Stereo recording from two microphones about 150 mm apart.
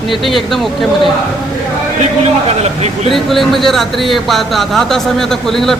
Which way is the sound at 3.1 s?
Centre (ahead or behind).